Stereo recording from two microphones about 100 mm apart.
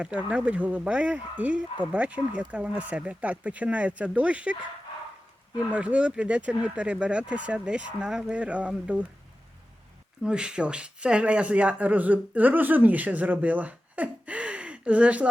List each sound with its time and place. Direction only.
0.0 s speech: 10° right (ahead or behind)
5.7 s speech: 10° right (ahead or behind)
10.2 s speech: 10° right (ahead or behind)